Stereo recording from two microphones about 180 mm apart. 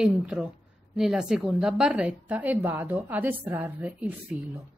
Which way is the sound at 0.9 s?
5° right (ahead or behind).